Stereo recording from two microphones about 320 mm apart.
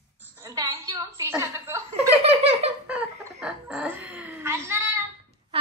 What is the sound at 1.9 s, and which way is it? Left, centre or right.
Giggle, centre.